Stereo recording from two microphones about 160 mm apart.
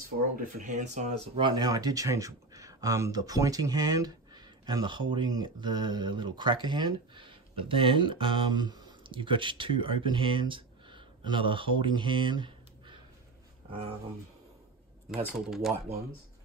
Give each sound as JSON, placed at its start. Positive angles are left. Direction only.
{"t": 0.1, "sound": "speech", "side_deg": -90}
{"t": 0.7, "sound": "speech", "side_deg": -50}
{"t": 1.4, "sound": "speech", "side_deg": -25}
{"t": 15.3, "sound": "speech", "side_deg": 0}